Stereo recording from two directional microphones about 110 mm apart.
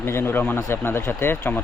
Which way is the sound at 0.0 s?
20° left (ahead or behind).